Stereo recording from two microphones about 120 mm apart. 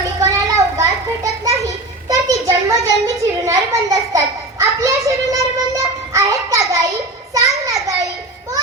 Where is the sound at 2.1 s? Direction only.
25° right (ahead or behind).